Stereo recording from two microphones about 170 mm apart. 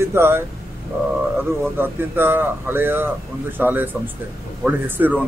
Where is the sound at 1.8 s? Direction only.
10° right (ahead or behind).